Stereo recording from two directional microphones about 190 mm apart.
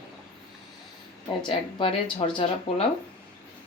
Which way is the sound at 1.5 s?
30° left (ahead or behind).